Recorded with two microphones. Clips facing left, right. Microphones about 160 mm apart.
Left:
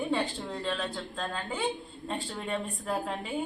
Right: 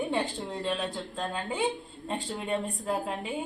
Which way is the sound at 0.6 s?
15° right (ahead or behind).